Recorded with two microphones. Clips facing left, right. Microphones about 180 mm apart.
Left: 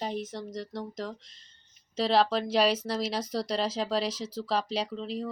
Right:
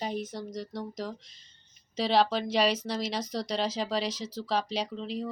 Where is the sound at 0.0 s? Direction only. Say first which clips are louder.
Even; centre (ahead or behind).